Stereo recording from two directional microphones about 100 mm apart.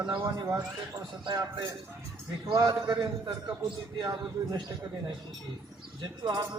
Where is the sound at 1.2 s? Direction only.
45° right (ahead or behind).